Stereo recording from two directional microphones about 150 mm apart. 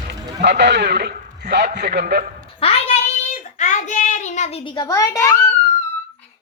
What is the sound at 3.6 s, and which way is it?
Child singing, 50° left (ahead or behind).